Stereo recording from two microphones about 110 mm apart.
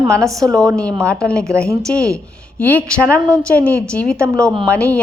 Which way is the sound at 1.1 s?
10° left (ahead or behind).